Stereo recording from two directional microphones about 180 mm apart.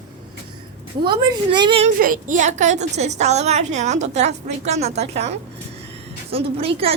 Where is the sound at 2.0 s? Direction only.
50° right (ahead or behind); by 6.7 s 35° right (ahead or behind).